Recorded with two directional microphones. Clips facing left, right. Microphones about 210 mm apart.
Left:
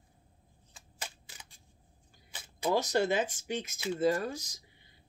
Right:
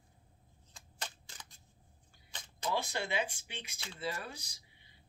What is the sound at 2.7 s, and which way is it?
Speech, 40° left (ahead or behind).